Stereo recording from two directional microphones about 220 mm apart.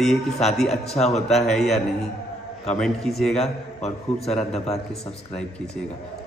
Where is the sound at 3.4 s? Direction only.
30° left (ahead or behind).